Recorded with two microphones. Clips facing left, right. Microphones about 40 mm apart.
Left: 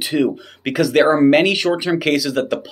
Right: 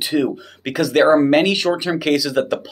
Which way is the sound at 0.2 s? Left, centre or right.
Centre.